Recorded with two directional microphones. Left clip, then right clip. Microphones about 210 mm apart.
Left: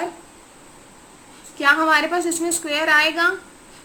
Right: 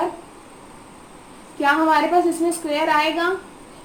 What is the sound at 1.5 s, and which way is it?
A woman's voice, 25° left (ahead or behind).